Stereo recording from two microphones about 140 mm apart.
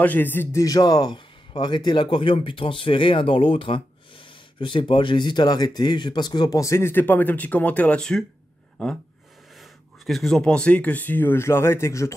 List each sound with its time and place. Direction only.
0.0 s a man's voice: 15° left (ahead or behind)